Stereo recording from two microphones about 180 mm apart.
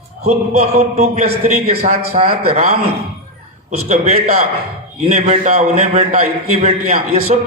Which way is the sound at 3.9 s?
35° right (ahead or behind).